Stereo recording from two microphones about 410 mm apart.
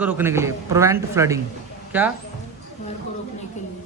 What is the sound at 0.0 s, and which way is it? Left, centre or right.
Speech, centre.